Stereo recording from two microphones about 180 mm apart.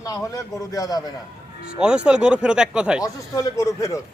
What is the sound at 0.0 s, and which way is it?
A man's voice, 20° left (ahead or behind).